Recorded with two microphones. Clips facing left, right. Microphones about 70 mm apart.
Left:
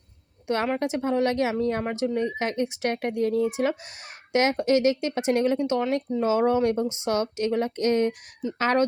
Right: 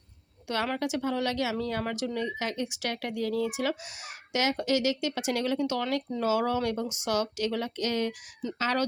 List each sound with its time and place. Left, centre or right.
0.4 s a woman's voice: left